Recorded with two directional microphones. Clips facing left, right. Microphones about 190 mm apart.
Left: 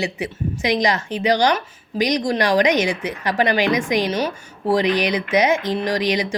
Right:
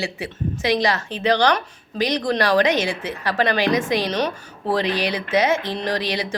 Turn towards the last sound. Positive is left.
turn(degrees=15)  # may be behind; listen again after turning